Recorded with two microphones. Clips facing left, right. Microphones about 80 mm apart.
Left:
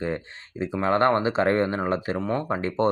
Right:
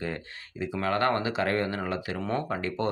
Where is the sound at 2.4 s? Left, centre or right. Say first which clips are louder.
Left 6 dB; left.